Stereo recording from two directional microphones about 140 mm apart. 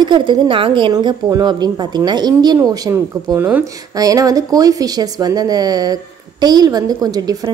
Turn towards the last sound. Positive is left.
turn(degrees=-25)  # may be behind; listen again after turning